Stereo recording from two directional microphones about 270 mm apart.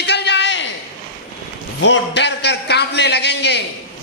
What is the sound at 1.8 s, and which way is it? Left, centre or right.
A man's voice, left.